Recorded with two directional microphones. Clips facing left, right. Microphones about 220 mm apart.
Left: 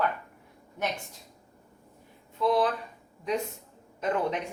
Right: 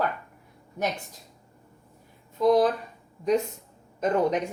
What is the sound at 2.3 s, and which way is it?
Speech, 40° right (ahead or behind).